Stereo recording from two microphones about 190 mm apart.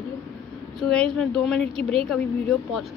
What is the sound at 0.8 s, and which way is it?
Speech, 5° left (ahead or behind).